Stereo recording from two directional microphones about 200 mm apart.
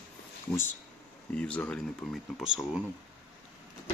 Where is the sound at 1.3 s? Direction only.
5° left (ahead or behind).